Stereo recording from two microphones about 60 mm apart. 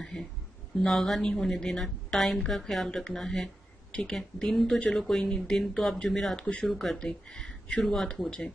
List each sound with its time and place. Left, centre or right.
0.1 s a woman's voice: centre
6.7 s a woman's voice: centre
7.9 s a woman's voice: centre